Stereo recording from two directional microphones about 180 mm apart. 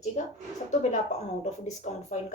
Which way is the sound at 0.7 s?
40° left (ahead or behind).